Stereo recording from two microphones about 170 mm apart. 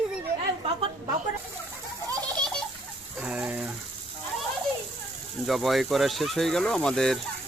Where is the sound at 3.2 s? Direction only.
5° right (ahead or behind).